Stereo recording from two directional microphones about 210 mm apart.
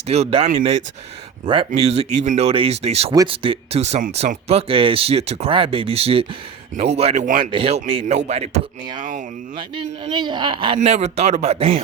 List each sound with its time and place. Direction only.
0.1 s speech: 30° right (ahead or behind)